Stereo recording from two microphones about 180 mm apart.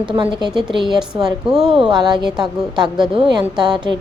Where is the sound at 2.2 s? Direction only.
Centre (ahead or behind).